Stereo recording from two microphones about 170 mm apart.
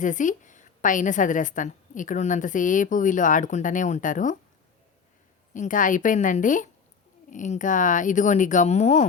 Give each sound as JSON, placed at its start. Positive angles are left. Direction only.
{"t": 0.0, "sound": "a woman's voice", "side_deg": 50}
{"t": 5.5, "sound": "a woman's voice", "side_deg": 50}